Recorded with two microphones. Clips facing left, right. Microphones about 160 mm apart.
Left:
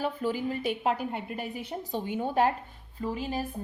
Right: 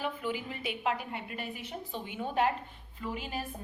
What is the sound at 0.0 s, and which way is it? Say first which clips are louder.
A woman's voice: left 5 dB; 40° left (ahead or behind).